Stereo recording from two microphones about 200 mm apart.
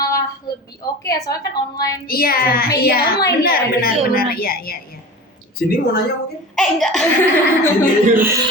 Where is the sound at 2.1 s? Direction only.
50° left (ahead or behind).